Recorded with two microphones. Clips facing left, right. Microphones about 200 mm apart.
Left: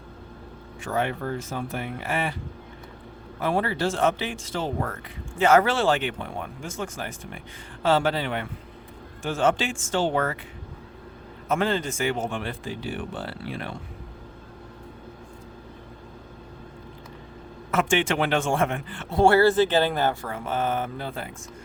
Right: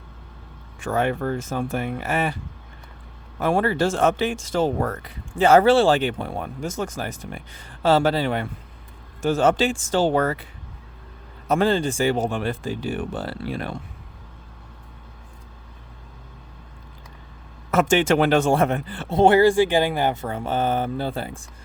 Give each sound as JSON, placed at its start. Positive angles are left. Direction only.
{"t": 0.8, "sound": "speech", "side_deg": -45}
{"t": 3.4, "sound": "speech", "side_deg": -50}
{"t": 11.4, "sound": "speech", "side_deg": -35}
{"t": 17.7, "sound": "speech", "side_deg": -40}
{"t": 19.1, "sound": "speech", "side_deg": -20}
{"t": 20.3, "sound": "speech", "side_deg": -30}